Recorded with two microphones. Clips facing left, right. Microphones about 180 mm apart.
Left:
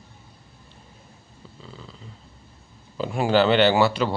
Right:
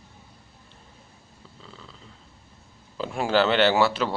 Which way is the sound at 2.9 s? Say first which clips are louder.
Left 3 dB; centre (ahead or behind).